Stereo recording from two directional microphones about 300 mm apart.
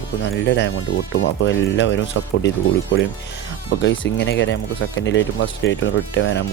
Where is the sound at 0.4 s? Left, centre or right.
Left.